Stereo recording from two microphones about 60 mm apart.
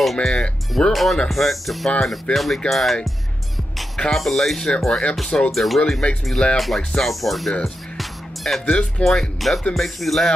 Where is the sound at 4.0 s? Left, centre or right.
Centre.